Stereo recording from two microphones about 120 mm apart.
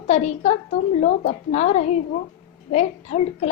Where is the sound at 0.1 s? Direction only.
60° left (ahead or behind).